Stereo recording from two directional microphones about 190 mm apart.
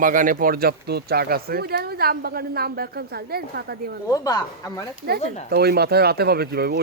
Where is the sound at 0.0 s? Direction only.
45° right (ahead or behind).